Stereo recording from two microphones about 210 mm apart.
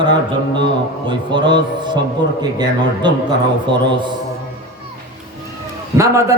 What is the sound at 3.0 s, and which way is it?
Speech, 20° right (ahead or behind).